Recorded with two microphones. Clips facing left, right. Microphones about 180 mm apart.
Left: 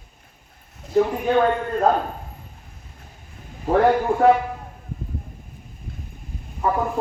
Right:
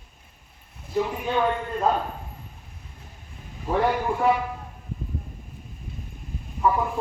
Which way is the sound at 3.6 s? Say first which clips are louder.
Left 6 dB; 60° left (ahead or behind).